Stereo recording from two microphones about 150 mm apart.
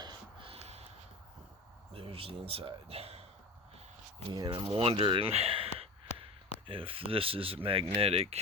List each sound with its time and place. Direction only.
0.0 s a sound: 30° right (ahead or behind)
1.9 s speech: 40° right (ahead or behind)
4.3 s speech: 30° right (ahead or behind)
6.7 s speech: 40° right (ahead or behind)